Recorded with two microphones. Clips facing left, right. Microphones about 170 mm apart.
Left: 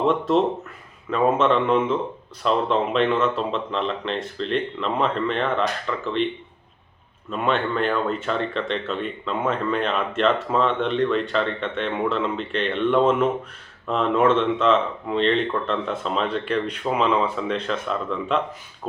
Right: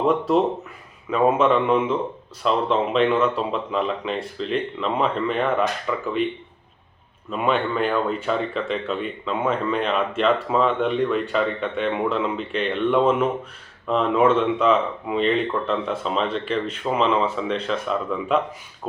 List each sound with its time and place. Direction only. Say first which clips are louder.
0.1 s speech: right 1 dB; 5° right (ahead or behind)
7.3 s speech: right 1 dB; 5° right (ahead or behind)